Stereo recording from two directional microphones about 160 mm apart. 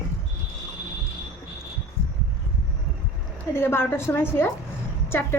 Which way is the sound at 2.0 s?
15° left (ahead or behind).